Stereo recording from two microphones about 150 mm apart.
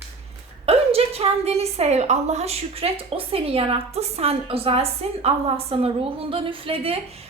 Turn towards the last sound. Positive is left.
turn(degrees=-40)  # may be behind; listen again after turning